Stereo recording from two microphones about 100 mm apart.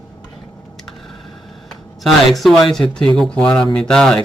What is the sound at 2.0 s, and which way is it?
Speech, centre (ahead or behind).